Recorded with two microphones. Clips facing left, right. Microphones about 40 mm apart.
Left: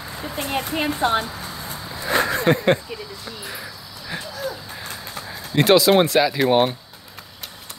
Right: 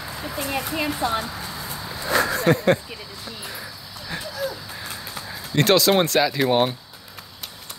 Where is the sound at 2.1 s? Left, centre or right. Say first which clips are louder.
Left 1 dB; left.